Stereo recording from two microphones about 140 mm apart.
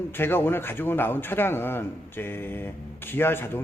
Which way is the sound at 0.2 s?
15° left (ahead or behind).